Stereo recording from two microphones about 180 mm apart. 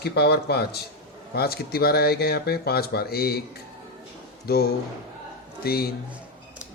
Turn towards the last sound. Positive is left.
turn(degrees=60)  # may be behind; listen again after turning